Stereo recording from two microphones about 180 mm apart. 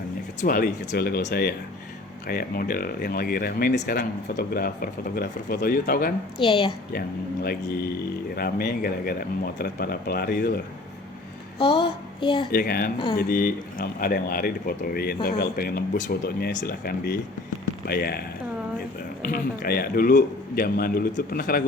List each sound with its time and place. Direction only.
0.4 s speech: 50° left (ahead or behind)
6.4 s a sound: 30° left (ahead or behind)
8.4 s speech: 55° left (ahead or behind)
11.6 s a sound: 30° left (ahead or behind)
12.5 s speech: 55° left (ahead or behind)
19.2 s speech: 55° left (ahead or behind)